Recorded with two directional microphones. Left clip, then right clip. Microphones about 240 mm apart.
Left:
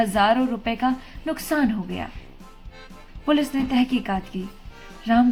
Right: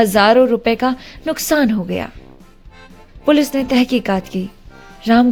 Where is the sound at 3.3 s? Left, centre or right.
Right.